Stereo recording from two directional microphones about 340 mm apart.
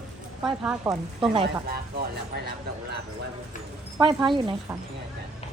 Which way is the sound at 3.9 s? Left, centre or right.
Centre.